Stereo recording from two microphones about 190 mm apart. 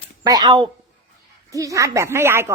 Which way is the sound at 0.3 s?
20° right (ahead or behind).